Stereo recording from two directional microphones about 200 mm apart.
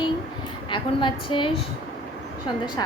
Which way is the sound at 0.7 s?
25° left (ahead or behind).